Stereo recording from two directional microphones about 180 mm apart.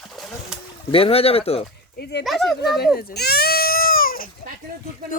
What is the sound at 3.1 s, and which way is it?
Goat, 65° left (ahead or behind).